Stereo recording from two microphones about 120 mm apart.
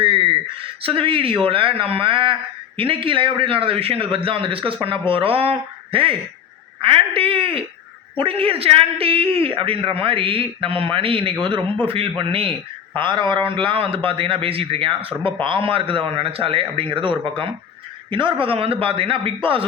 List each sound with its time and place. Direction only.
0.0 s a man's voice: 45° right (ahead or behind)